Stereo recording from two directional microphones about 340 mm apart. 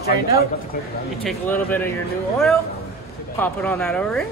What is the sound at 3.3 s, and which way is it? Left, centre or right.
Speech, centre.